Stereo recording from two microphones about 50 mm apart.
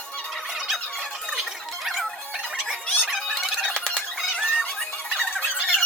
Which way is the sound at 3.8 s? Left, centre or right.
Centre.